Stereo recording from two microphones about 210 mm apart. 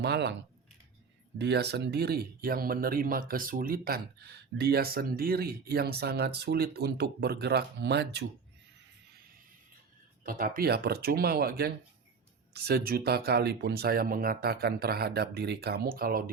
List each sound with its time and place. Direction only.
0.0 s speech: 55° right (ahead or behind)
1.4 s speech: 55° right (ahead or behind)
10.2 s speech: 40° right (ahead or behind)